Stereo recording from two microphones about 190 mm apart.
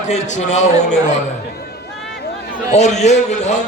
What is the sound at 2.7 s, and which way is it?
Speech, 35° left (ahead or behind).